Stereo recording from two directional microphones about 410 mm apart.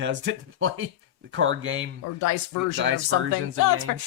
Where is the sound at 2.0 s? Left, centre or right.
Left.